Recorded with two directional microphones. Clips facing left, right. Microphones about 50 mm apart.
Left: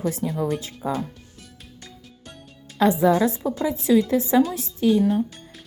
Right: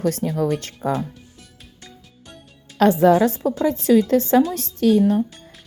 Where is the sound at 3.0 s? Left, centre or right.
Right.